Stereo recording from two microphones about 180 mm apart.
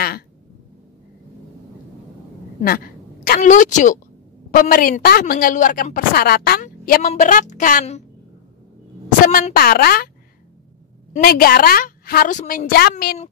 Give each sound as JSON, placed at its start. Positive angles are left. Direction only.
{"t": 2.6, "sound": "throat clearing", "side_deg": 55}
{"t": 3.3, "sound": "a woman's voice", "side_deg": 45}
{"t": 9.2, "sound": "a woman's voice", "side_deg": 50}
{"t": 11.1, "sound": "a woman's voice", "side_deg": 55}